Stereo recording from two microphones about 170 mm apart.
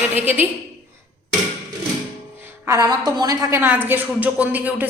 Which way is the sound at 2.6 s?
20° right (ahead or behind).